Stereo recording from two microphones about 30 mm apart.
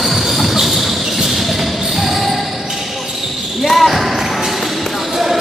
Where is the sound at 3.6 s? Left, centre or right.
Centre.